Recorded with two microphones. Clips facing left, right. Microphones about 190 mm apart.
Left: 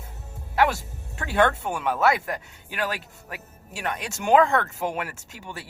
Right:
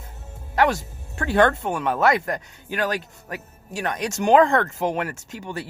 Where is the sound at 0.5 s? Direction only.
45° right (ahead or behind).